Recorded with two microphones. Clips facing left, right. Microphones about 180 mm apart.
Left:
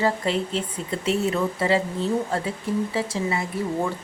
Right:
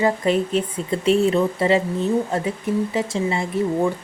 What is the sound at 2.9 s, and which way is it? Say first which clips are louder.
Speech: right 3 dB; 25° right (ahead or behind).